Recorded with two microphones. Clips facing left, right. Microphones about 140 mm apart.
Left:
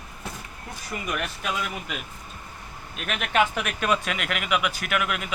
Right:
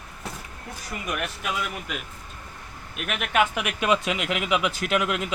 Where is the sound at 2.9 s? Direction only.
5° right (ahead or behind).